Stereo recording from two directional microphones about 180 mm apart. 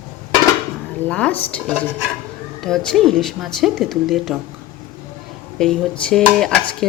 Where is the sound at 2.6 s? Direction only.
Centre (ahead or behind).